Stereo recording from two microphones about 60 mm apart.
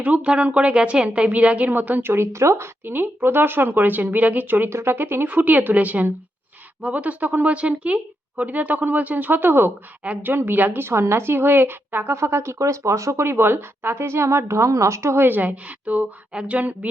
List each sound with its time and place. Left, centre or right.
0.0 s a woman's voice: right
2.8 s a woman's voice: right
4.7 s a woman's voice: right
7.5 s a woman's voice: centre; by 12.1 s right
12.1 s a woman's voice: right
12.5 s speech: right
13.2 s a woman's voice: right